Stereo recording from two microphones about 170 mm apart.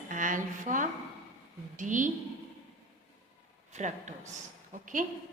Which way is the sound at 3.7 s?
45° right (ahead or behind).